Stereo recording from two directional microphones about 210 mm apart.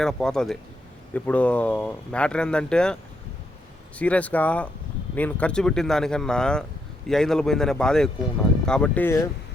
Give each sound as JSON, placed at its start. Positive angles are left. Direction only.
{"t": 0.0, "sound": "speech", "side_deg": 0}